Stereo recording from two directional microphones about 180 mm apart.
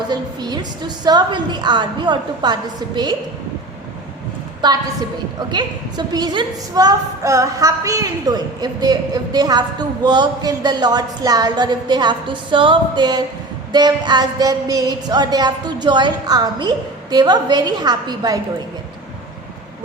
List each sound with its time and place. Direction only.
0.1 s a woman's voice: 25° right (ahead or behind)
4.6 s a woman's voice: 20° right (ahead or behind)